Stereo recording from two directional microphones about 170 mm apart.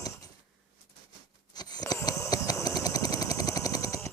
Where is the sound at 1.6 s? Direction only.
25° left (ahead or behind).